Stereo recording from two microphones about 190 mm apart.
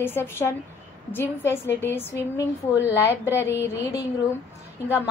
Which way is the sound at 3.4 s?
15° left (ahead or behind).